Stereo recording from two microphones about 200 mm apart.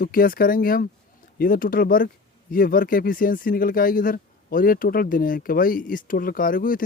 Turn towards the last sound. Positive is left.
turn(degrees=45)  # may be behind; listen again after turning